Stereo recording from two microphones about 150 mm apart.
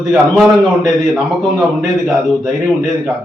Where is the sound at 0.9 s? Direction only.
Centre (ahead or behind).